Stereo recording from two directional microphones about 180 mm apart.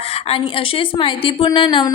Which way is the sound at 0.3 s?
30° left (ahead or behind).